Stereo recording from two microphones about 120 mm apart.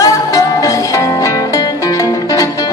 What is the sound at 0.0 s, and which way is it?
Music, 30° left (ahead or behind).